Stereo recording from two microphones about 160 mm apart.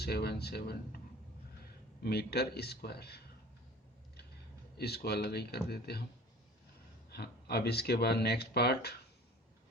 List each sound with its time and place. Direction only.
0.0 s speech: 90° left
2.0 s speech: 90° left
4.8 s speech: 90° left
7.1 s speech: 90° left